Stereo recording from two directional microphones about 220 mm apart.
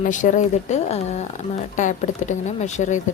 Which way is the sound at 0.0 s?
35° left (ahead or behind).